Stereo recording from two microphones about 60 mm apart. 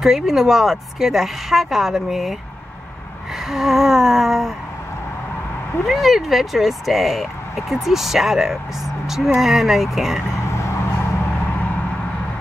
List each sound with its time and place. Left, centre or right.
0.0 s speech: centre
3.4 s speech: centre
5.9 s speech: centre
10.5 s a sound: left